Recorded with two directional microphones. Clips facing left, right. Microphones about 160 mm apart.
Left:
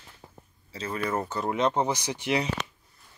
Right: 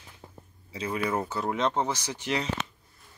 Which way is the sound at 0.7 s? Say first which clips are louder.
Right 1 dB; 10° right (ahead or behind).